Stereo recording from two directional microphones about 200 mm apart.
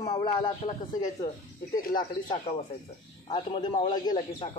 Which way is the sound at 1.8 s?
45° left (ahead or behind).